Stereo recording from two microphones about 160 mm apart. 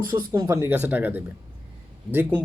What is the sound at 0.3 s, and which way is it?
Speech, 20° right (ahead or behind).